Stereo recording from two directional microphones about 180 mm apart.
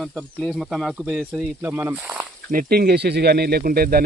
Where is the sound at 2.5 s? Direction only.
55° right (ahead or behind).